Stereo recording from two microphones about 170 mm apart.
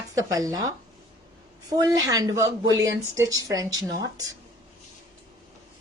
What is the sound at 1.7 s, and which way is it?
A woman's voice, 20° right (ahead or behind).